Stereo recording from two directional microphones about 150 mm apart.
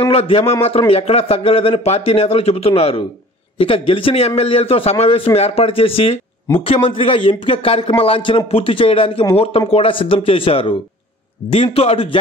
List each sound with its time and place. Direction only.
0.0 s a man's voice: 40° left (ahead or behind)